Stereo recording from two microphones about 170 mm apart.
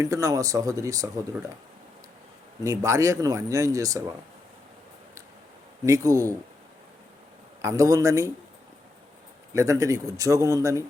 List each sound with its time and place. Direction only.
0.0 s speech: 20° right (ahead or behind)
2.6 s speech: 15° right (ahead or behind)
5.8 s speech: 20° right (ahead or behind)
7.6 s speech: 20° right (ahead or behind)
9.5 s speech: 15° right (ahead or behind)